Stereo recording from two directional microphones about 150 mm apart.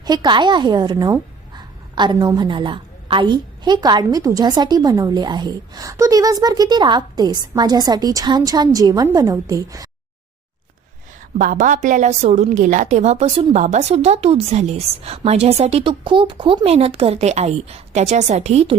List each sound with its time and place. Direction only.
0.0 s a woman's voice: 30° right (ahead or behind)
11.3 s a woman's voice: 65° right (ahead or behind); by 18.8 s 45° right (ahead or behind)